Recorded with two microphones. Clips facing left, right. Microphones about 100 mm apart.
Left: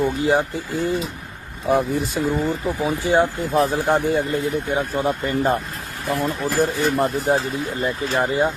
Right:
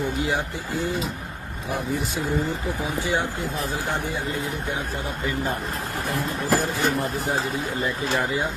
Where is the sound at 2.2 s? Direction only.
45° left (ahead or behind).